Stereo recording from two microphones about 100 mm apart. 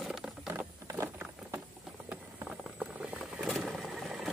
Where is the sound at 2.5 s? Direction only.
5° right (ahead or behind).